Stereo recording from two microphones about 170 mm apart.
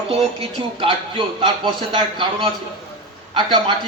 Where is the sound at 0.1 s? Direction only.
35° right (ahead or behind).